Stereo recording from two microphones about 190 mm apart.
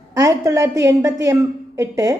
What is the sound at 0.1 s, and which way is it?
A woman's voice, 15° right (ahead or behind).